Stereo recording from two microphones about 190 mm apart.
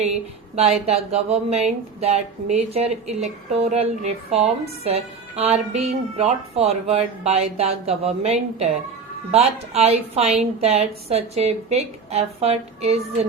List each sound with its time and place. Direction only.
0.5 s a woman's voice: 35° right (ahead or behind)